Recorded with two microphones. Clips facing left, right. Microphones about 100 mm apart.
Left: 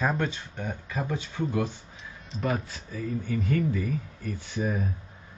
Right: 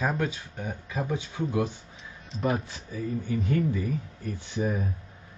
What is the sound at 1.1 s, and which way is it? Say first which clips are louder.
Speech: right 1 dB; 15° right (ahead or behind).